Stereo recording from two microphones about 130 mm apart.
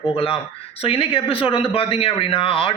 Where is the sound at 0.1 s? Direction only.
45° left (ahead or behind).